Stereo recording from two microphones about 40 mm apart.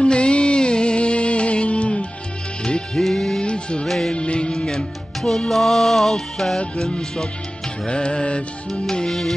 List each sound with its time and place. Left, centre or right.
0.0 s music: left
3.0 s music: centre
3.3 s music: left
3.8 s music: centre
4.1 s music: left
7.8 s music: left